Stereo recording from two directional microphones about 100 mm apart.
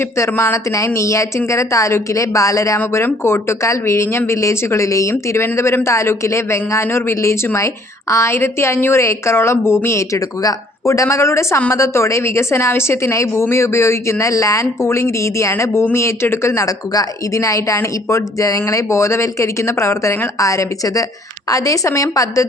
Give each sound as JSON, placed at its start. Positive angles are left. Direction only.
{"t": 0.0, "sound": "a woman's voice", "side_deg": 25}